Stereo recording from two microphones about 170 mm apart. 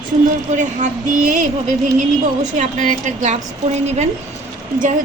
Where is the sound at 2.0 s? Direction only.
45° right (ahead or behind).